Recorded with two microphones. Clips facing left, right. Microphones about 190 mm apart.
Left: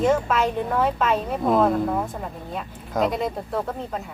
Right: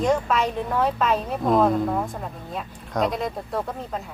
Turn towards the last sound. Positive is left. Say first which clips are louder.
# left 2 dB
turn(degrees=0)  # may be behind; listen again after turning